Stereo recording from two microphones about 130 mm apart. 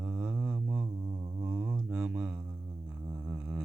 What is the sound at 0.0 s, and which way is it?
Mantra, 10° right (ahead or behind).